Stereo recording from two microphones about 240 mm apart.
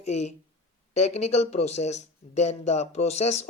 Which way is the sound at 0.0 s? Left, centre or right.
Left.